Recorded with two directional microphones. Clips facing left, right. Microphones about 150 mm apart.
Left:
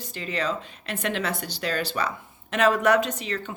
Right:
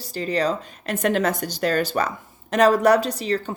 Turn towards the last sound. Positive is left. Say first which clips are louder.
# right 6 dB
turn(degrees=-35)  # may be behind; listen again after turning